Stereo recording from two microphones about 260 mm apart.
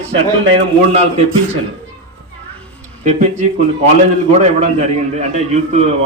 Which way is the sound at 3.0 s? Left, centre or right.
Right.